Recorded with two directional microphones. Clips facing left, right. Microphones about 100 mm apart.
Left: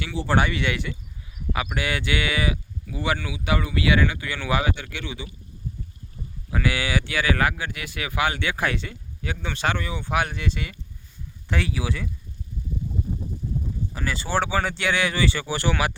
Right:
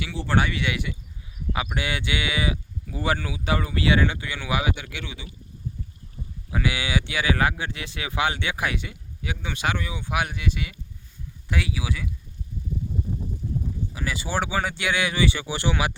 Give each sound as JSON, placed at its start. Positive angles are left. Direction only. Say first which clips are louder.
{"t": 0.0, "sound": "speech", "louder": "left 2 dB", "side_deg": 0}
{"t": 1.5, "sound": "speech", "louder": "left 1 dB", "side_deg": -20}
{"t": 2.9, "sound": "speech", "louder": "even", "side_deg": -35}
{"t": 4.3, "sound": "speech", "louder": "left 2 dB", "side_deg": -15}
{"t": 6.5, "sound": "speech", "louder": "left 1 dB", "side_deg": -20}
{"t": 13.9, "sound": "speech", "louder": "left 3 dB", "side_deg": -10}